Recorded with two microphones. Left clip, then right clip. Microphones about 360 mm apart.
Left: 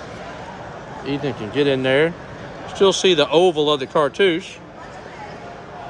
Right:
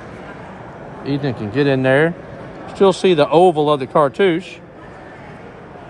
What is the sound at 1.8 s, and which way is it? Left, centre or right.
Speech, centre.